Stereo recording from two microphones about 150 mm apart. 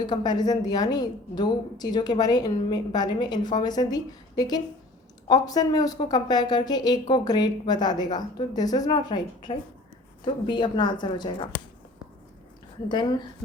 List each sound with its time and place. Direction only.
0.0 s a woman's voice: 30° left (ahead or behind)
12.9 s a woman's voice: 30° left (ahead or behind)